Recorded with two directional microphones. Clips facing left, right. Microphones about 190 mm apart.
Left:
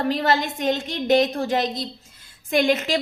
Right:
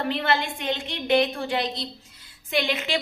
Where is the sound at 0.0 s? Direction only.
40° left (ahead or behind).